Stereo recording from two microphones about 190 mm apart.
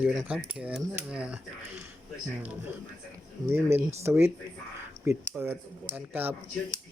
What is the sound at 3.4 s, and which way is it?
Speech, 20° right (ahead or behind).